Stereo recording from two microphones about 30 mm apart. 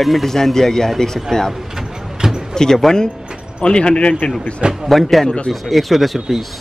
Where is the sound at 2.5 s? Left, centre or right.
Left.